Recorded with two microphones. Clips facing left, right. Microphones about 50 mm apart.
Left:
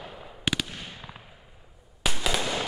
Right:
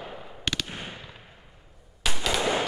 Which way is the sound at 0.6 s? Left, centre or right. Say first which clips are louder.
Right 3 dB; right.